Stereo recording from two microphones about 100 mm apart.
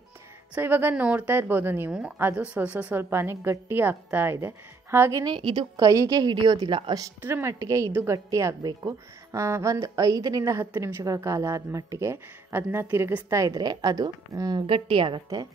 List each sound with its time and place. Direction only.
0.6 s a woman's voice: 20° right (ahead or behind)
1.9 s a woman's voice: 10° right (ahead or behind)
2.1 s a woman's voice: 20° right (ahead or behind)
5.2 s a woman's voice: 50° right (ahead or behind)
7.2 s a woman's voice: 20° right (ahead or behind)
13.6 s a woman's voice: 45° right (ahead or behind)
14.7 s a woman's voice: 60° right (ahead or behind)